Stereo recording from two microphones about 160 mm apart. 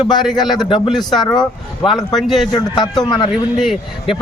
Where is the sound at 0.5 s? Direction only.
25° left (ahead or behind).